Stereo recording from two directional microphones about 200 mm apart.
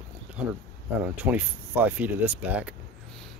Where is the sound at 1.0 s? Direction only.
10° right (ahead or behind).